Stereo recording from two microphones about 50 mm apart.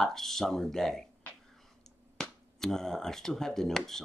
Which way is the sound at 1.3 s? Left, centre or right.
Left.